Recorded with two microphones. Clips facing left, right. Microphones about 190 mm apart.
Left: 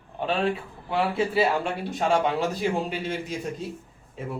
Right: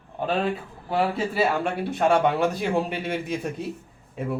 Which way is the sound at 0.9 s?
40° right (ahead or behind).